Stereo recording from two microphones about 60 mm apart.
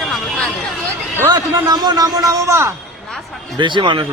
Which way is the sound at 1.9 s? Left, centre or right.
Right.